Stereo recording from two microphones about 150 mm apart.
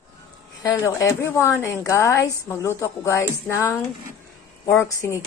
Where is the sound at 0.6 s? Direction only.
20° left (ahead or behind).